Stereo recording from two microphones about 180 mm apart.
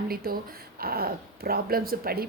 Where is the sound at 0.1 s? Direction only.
55° right (ahead or behind).